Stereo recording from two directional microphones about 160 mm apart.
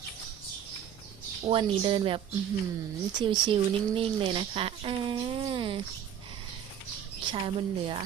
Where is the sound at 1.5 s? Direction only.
35° right (ahead or behind).